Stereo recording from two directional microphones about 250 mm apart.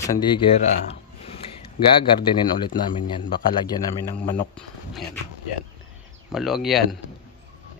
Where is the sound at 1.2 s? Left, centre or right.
Left.